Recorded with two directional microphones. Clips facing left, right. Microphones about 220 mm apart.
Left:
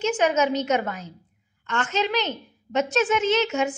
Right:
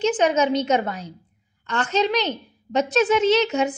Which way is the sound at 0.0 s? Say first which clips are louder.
Right 2 dB; 35° right (ahead or behind).